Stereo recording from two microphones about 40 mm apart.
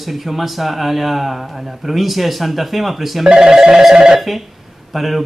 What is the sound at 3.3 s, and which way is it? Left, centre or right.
Speech, centre.